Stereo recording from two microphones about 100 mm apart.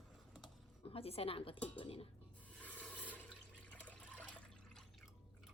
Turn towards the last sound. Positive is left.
turn(degrees=15)  # may be behind; listen again after turning